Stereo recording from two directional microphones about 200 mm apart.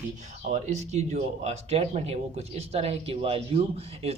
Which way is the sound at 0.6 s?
35° right (ahead or behind).